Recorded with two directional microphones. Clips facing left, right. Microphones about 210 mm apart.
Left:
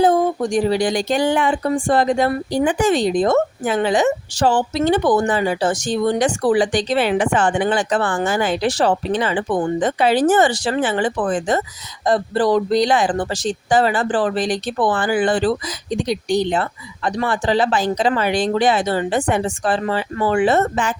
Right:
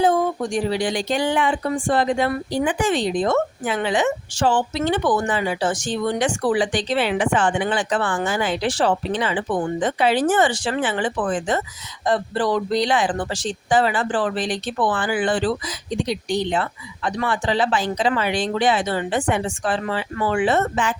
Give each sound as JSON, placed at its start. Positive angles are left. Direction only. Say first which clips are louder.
{"t": 0.0, "sound": "speech", "louder": "left 3 dB", "side_deg": 40}